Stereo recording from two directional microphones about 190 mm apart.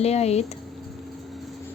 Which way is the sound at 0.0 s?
35° left (ahead or behind).